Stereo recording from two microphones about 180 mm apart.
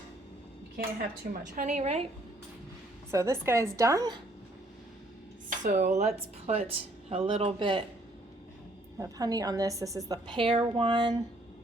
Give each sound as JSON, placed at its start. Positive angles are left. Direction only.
{"t": 1.3, "sound": "speech", "side_deg": -45}
{"t": 3.1, "sound": "a woman's voice", "side_deg": -15}
{"t": 5.5, "sound": "speech", "side_deg": -45}
{"t": 9.0, "sound": "a woman's voice", "side_deg": -20}